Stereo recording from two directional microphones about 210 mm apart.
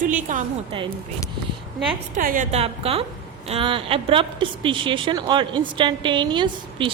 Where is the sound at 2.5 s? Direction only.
30° right (ahead or behind).